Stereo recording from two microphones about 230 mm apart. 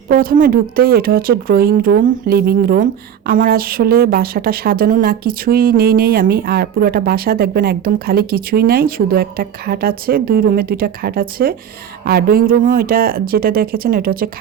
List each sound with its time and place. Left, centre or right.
0.1 s speech: right